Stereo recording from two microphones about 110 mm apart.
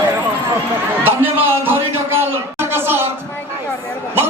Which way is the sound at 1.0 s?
20° right (ahead or behind).